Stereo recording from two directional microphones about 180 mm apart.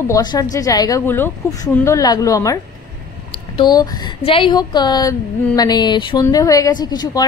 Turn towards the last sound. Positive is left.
turn(degrees=20)  # may be behind; listen again after turning